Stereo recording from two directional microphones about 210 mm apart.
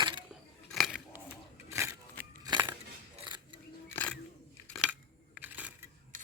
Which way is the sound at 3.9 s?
10° left (ahead or behind).